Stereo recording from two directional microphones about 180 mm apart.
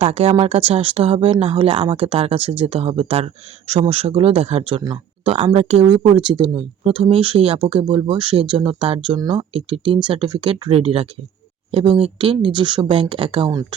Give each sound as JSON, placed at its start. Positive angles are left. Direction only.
{"t": 0.0, "sound": "speech", "side_deg": -35}